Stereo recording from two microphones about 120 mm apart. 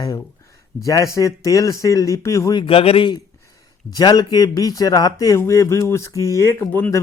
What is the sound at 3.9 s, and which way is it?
Speech, 35° left (ahead or behind).